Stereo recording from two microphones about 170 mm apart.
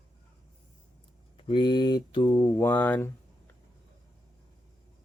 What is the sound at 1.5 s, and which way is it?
Mantra, 25° left (ahead or behind).